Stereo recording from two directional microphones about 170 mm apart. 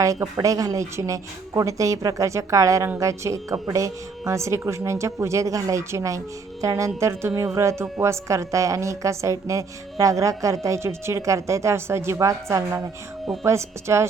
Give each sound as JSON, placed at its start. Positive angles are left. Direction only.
{"t": 0.0, "sound": "a woman's voice", "side_deg": -20}